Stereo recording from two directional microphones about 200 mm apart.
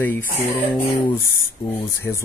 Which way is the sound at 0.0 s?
10° left (ahead or behind).